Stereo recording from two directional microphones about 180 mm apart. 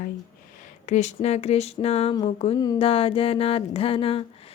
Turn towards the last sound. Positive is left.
turn(degrees=30)  # may be behind; listen again after turning